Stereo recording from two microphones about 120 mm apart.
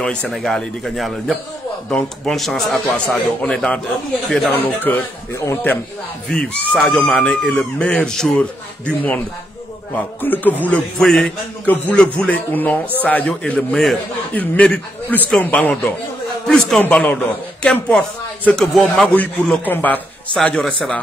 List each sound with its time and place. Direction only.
0.0 s a man's voice: 10° left (ahead or behind)